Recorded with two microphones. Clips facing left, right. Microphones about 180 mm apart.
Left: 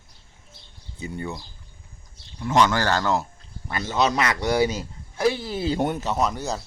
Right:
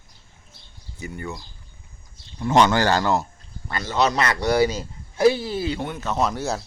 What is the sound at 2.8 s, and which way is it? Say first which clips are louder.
Speech: right 2 dB; 10° right (ahead or behind).